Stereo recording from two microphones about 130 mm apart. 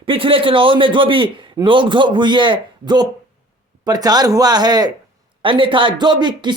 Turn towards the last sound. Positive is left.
turn(degrees=-35)  # may be behind; listen again after turning